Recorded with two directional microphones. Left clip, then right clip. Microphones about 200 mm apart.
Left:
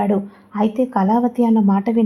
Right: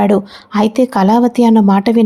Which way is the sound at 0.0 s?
35° right (ahead or behind).